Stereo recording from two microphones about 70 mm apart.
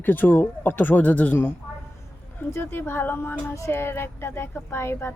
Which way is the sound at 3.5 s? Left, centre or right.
Left.